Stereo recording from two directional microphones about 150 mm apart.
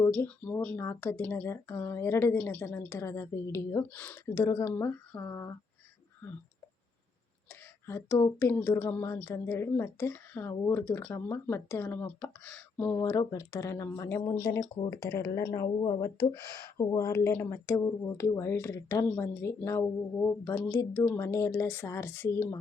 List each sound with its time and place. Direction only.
0.1 s speech: 10° left (ahead or behind)
7.9 s speech: 15° left (ahead or behind)